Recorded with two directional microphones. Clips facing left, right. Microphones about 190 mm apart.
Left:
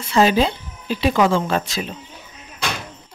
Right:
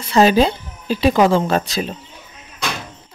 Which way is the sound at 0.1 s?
40° right (ahead or behind).